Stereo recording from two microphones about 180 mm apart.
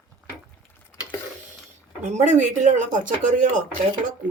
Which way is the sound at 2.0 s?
40° right (ahead or behind).